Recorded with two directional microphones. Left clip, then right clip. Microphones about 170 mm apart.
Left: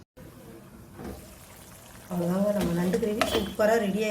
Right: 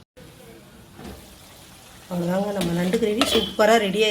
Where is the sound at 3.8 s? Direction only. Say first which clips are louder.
Right 7 dB; centre (ahead or behind).